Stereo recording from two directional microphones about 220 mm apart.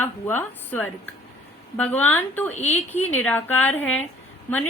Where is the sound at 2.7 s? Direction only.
30° left (ahead or behind).